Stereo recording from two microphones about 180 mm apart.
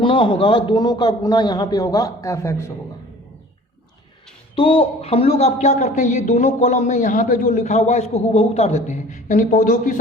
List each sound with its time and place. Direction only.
0.0 s a man's voice: 30° left (ahead or behind)
4.5 s speech: 30° left (ahead or behind); by 10.0 s 45° left (ahead or behind)